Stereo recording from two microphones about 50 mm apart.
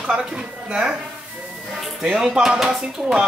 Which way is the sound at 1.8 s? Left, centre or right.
Centre.